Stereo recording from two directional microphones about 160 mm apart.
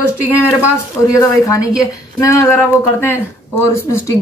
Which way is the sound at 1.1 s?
20° left (ahead or behind).